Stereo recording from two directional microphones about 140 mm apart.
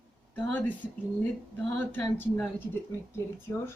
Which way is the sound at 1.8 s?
15° left (ahead or behind).